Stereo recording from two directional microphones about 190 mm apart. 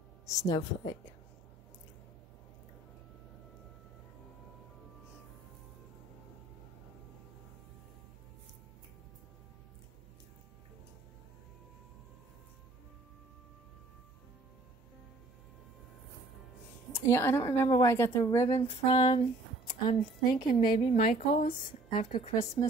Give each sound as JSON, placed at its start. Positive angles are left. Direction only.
{"t": 0.3, "sound": "speech", "side_deg": 15}
{"t": 16.9, "sound": "a woman's voice", "side_deg": 15}
{"t": 18.5, "sound": "speech", "side_deg": 30}